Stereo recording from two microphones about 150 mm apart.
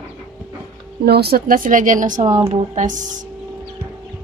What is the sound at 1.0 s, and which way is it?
Speech, 90° right.